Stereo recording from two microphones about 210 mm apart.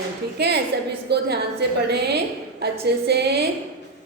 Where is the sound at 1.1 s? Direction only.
50° right (ahead or behind).